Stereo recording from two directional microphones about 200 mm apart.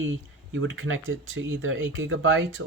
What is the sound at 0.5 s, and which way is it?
Speech, 70° right (ahead or behind).